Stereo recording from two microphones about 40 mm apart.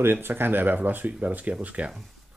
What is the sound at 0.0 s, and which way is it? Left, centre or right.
Speech, right.